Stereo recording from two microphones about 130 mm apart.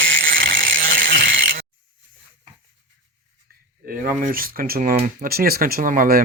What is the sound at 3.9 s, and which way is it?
Speech, 90° right.